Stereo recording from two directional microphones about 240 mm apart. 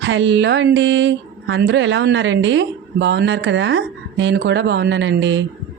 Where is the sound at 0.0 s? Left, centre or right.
Right.